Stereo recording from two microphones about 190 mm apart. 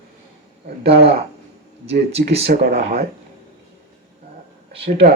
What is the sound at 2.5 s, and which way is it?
Speech, 55° right (ahead or behind).